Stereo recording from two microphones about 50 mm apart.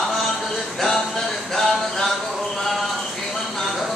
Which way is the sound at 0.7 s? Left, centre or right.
Centre.